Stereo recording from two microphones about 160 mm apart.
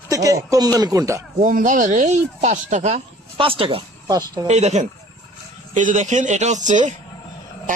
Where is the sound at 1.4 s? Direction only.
55° right (ahead or behind); by 3.8 s 35° right (ahead or behind).